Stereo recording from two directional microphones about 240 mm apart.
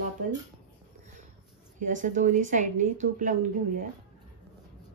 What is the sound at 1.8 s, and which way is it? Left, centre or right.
Speech, right.